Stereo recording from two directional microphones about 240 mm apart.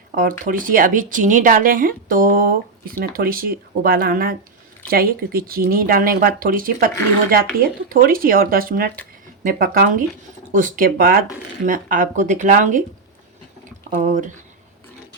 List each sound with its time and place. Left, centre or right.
0.2 s speech: right
14.0 s speech: right